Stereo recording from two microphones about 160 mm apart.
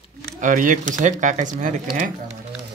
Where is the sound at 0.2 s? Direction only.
55° right (ahead or behind).